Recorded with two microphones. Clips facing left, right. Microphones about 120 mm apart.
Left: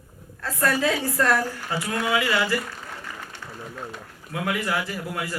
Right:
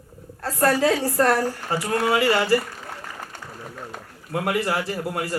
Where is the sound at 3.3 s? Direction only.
45° right (ahead or behind).